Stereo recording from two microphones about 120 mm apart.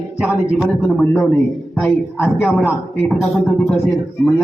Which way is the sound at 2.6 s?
15° left (ahead or behind).